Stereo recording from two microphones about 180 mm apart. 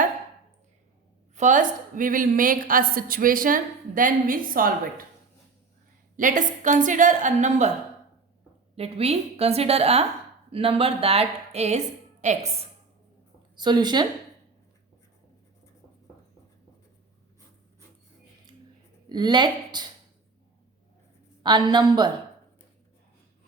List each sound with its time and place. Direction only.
1.4 s a woman's voice: 45° right (ahead or behind)
6.1 s a woman's voice: 45° right (ahead or behind)
8.7 s a woman's voice: 35° right (ahead or behind)
13.6 s a woman's voice: 25° right (ahead or behind)
19.0 s speech: 25° right (ahead or behind)
21.4 s a woman's voice: 25° right (ahead or behind)